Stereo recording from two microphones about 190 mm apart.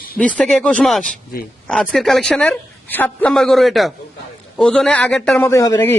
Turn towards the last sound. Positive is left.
turn(degrees=15)  # may be behind; listen again after turning